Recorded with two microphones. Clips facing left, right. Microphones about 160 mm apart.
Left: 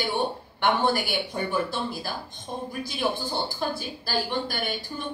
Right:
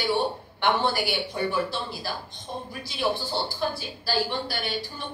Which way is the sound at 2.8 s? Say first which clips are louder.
Right 2 dB; 50° left (ahead or behind).